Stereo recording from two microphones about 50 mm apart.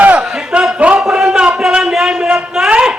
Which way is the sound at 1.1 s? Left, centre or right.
Centre.